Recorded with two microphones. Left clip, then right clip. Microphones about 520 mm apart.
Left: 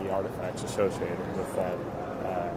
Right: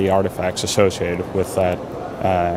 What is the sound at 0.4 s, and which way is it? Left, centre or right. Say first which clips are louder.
Speech: right 11 dB; right.